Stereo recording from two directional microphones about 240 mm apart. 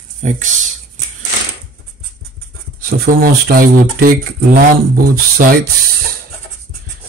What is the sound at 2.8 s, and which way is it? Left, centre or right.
Speech, right.